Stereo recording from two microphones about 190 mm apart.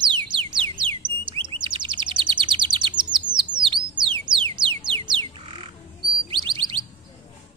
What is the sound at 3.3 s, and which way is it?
Music, 25° right (ahead or behind).